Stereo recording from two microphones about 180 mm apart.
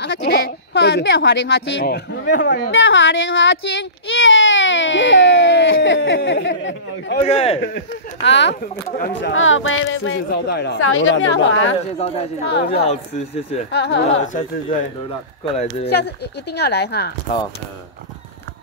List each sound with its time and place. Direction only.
0.0 s speech: 75° left (ahead or behind); by 7.2 s 90° left
7.2 s speech: 35° left (ahead or behind)
7.6 s a woman's voice: 80° left
12.7 s speech: 35° left (ahead or behind)
13.7 s a woman's voice: 70° left (ahead or behind)
14.2 s speech: 45° left (ahead or behind)
15.4 s speech: 35° left (ahead or behind)
15.9 s a woman's voice: 65° left (ahead or behind)